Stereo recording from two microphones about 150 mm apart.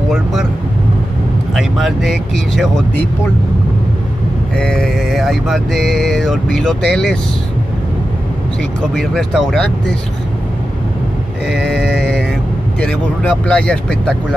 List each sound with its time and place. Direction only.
0.1 s mantra: centre (ahead or behind)
1.5 s mantra: centre (ahead or behind)
4.6 s mantra: 5° left (ahead or behind)
8.9 s mantra: centre (ahead or behind)
11.7 s mantra: centre (ahead or behind)